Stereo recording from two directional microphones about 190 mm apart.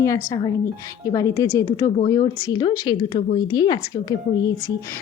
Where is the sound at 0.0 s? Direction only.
15° left (ahead or behind).